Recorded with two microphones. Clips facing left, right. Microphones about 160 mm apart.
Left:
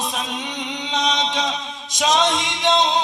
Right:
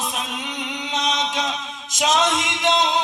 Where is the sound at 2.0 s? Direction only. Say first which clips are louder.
Left 1 dB; 5° right (ahead or behind).